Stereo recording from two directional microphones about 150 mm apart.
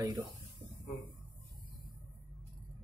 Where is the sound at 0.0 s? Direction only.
25° right (ahead or behind).